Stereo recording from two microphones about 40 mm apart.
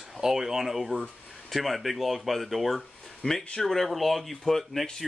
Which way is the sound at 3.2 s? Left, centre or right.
Left.